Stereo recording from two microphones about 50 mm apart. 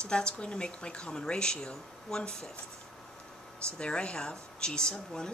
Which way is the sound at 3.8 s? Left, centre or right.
Centre.